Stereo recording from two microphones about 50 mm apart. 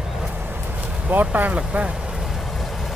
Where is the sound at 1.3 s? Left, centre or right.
Right.